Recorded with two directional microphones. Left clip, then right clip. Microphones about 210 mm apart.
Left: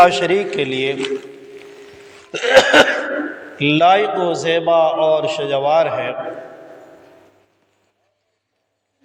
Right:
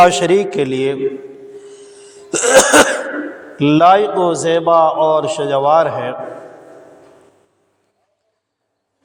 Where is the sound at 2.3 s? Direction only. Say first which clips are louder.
Right 1 dB; 50° right (ahead or behind).